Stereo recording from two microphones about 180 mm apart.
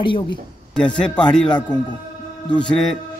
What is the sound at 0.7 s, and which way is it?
Speech, 5° left (ahead or behind).